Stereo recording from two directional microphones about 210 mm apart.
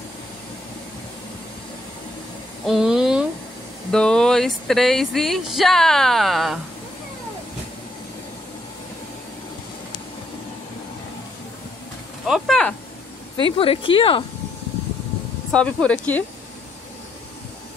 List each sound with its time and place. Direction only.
2.6 s a sound: centre (ahead or behind)
3.9 s speech: 5° left (ahead or behind)
12.3 s speech: centre (ahead or behind)
13.4 s speech: 25° left (ahead or behind)
15.5 s speech: 5° left (ahead or behind)